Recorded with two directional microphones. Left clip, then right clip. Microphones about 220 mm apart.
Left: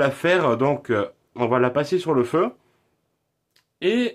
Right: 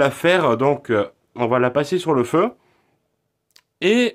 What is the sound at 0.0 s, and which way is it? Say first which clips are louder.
Speech: right 3 dB; 20° right (ahead or behind).